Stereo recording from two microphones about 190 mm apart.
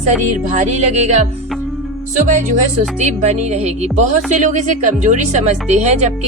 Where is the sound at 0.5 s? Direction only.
40° right (ahead or behind).